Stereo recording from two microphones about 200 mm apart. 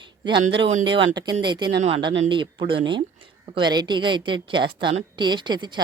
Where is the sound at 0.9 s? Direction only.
25° right (ahead or behind).